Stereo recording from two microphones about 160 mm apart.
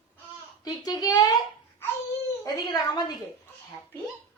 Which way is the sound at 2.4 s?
25° left (ahead or behind).